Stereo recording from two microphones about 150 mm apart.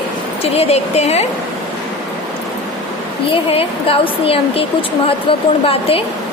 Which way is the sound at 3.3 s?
40° left (ahead or behind).